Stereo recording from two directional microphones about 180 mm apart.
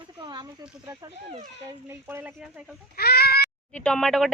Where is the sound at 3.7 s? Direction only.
5° left (ahead or behind).